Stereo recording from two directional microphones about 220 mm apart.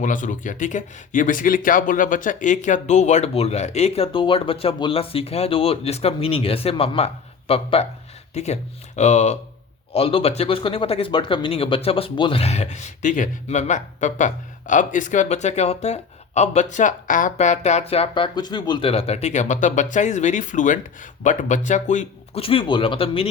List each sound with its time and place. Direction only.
0.0 s speech: 35° left (ahead or behind)